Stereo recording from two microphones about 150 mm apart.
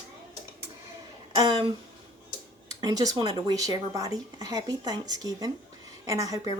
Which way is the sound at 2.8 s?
25° right (ahead or behind).